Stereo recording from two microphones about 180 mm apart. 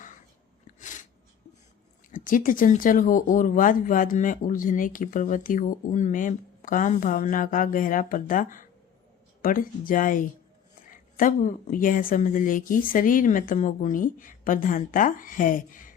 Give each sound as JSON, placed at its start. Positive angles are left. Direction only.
{"t": 0.8, "sound": "sneeze", "side_deg": 45}
{"t": 2.1, "sound": "speech", "side_deg": 50}